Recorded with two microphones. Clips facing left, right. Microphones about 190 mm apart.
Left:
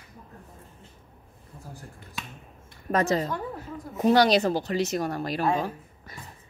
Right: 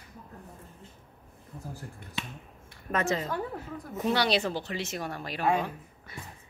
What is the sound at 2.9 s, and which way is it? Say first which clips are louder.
A woman's voice: left 5 dB; 35° left (ahead or behind).